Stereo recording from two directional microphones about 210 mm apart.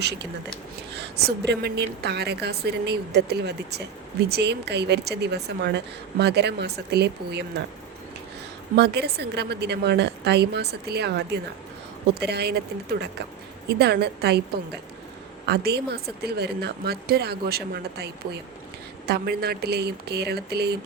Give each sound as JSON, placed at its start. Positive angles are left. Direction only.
{"t": 0.0, "sound": "a woman's voice", "side_deg": -55}
{"t": 8.7, "sound": "a woman's voice", "side_deg": -50}